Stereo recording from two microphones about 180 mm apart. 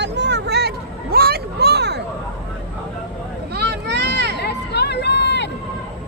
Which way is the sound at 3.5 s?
65° right (ahead or behind).